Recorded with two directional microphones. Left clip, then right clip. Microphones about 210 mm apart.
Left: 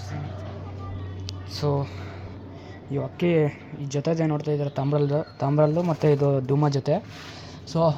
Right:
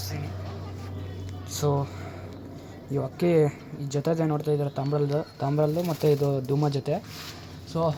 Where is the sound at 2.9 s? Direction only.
Centre (ahead or behind).